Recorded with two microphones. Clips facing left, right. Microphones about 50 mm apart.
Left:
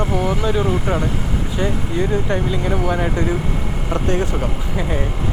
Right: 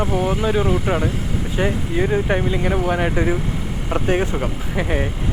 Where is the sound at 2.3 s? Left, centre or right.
Right.